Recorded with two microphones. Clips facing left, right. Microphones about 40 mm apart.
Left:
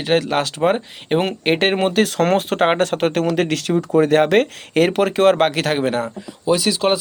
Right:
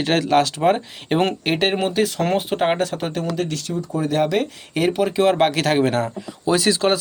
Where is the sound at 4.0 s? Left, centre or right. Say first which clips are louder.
Left 7 dB; left.